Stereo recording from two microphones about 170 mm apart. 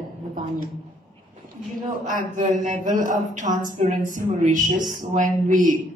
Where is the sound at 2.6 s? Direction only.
50° right (ahead or behind).